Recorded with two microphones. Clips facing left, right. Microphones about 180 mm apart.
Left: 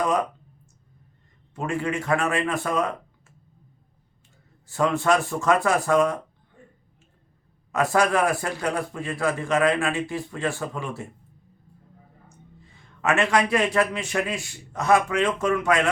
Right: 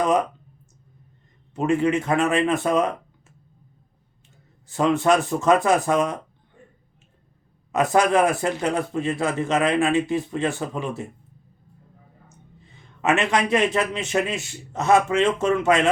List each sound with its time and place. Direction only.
1.5 s a man's voice: 20° right (ahead or behind)
4.7 s a man's voice: 20° right (ahead or behind)
7.7 s a man's voice: 20° right (ahead or behind)
12.7 s a man's voice: 20° right (ahead or behind)